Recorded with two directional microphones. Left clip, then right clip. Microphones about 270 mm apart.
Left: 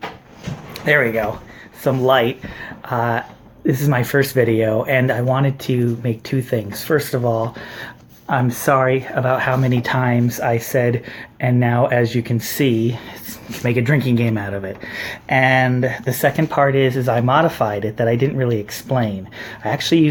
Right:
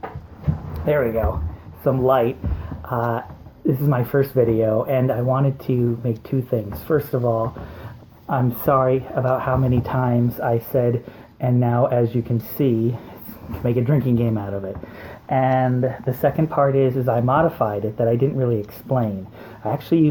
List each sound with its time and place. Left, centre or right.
0.9 s speech: left